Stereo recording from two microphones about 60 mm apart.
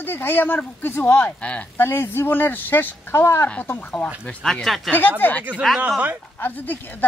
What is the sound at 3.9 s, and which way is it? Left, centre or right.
Speech, centre.